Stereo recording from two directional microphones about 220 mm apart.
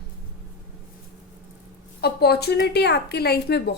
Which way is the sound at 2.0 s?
45° left (ahead or behind).